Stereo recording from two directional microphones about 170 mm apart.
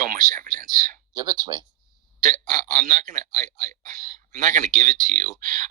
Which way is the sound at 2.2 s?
50° right (ahead or behind).